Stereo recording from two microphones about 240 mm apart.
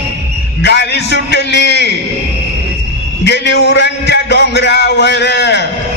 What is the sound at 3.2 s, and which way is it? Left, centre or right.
A man's voice, left.